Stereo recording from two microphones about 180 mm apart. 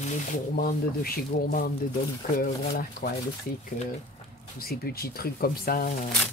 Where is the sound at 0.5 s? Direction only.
55° left (ahead or behind).